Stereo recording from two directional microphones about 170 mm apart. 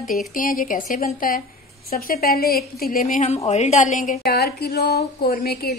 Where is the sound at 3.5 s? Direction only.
40° left (ahead or behind); by 5.8 s 65° left (ahead or behind).